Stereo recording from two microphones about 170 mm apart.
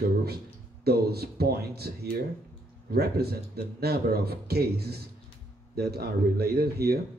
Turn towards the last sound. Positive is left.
turn(degrees=-65)  # may be behind; listen again after turning